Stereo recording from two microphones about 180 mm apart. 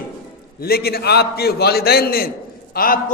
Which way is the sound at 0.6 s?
60° left (ahead or behind).